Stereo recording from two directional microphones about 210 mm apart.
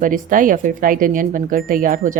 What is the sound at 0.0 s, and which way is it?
Speech, 40° right (ahead or behind).